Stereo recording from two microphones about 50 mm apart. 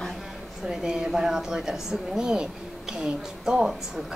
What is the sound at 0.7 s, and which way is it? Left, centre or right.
Speech, centre.